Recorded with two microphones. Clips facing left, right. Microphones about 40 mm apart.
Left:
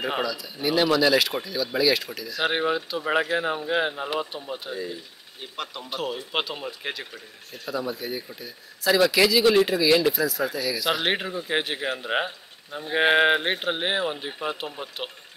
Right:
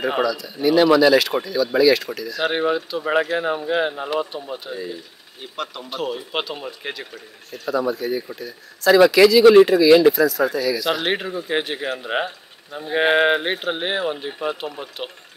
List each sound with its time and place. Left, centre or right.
0.0 s a man's voice: centre
5.9 s a man's voice: centre
8.4 s a man's voice: centre
9.4 s speech: right
9.8 s speech: centre
10.1 s a man's voice: centre